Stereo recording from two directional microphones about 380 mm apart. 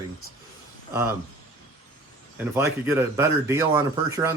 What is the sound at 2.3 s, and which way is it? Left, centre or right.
Speech, centre.